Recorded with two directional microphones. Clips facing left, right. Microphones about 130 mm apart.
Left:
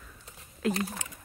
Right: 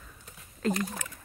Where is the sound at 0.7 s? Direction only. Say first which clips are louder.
Right 1 dB; 25° left (ahead or behind).